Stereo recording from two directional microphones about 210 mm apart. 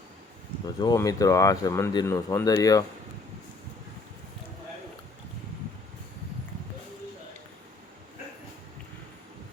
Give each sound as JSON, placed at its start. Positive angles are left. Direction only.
{"t": 0.6, "sound": "speech", "side_deg": 20}